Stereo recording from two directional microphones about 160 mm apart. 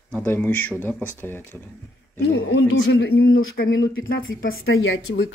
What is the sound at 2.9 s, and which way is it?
Speech, 85° left.